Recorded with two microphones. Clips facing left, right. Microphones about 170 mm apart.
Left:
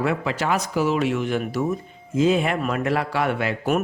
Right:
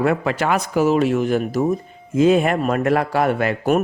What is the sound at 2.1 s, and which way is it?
Speech, 55° right (ahead or behind).